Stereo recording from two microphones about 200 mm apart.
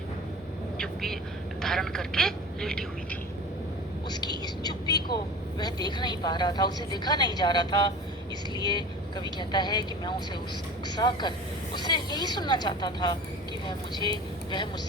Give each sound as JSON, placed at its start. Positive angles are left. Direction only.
{"t": 0.8, "sound": "vehicle", "side_deg": 0}
{"t": 1.6, "sound": "a sound", "side_deg": 0}
{"t": 4.1, "sound": "whispering", "side_deg": 20}
{"t": 5.5, "sound": "speech", "side_deg": 20}